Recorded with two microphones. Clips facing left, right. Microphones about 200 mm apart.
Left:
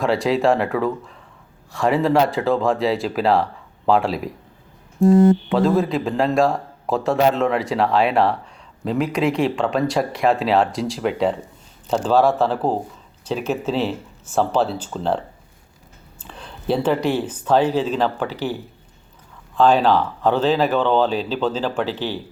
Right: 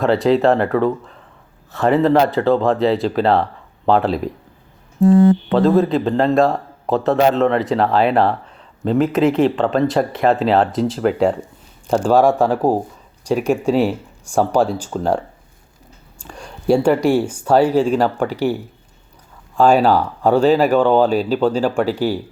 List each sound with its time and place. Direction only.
0.0 s a man's voice: centre (ahead or behind)
0.7 s speech: 35° right (ahead or behind)
1.7 s a man's voice: centre (ahead or behind)
5.5 s a man's voice: centre (ahead or behind)
16.2 s speech: 10° right (ahead or behind)
19.5 s speech: 10° right (ahead or behind)